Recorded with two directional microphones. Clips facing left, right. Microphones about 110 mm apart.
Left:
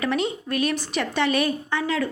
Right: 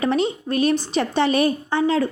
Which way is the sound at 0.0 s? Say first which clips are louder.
Right 4 dB; 30° right (ahead or behind).